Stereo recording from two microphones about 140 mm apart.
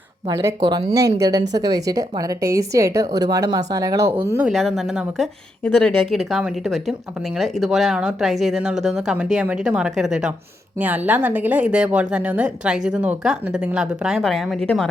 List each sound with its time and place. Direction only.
0.3 s a woman's voice: 25° right (ahead or behind)
4.5 s a woman's voice: centre (ahead or behind)